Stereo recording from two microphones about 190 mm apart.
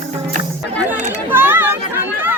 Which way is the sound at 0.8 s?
10° right (ahead or behind).